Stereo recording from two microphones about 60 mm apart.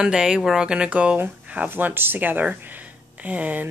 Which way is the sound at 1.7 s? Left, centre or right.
Right.